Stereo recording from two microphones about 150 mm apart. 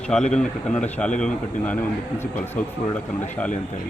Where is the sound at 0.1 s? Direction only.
5° left (ahead or behind).